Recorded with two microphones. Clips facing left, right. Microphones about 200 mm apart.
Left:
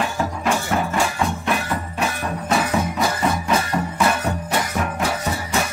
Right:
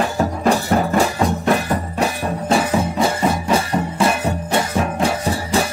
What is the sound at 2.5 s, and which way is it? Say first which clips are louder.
Music: right 3 dB; 30° right (ahead or behind).